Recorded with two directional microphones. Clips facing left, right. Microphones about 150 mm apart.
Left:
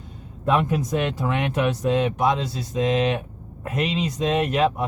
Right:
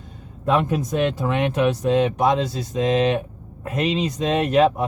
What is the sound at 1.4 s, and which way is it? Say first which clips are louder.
Speech: right 5 dB; 30° right (ahead or behind).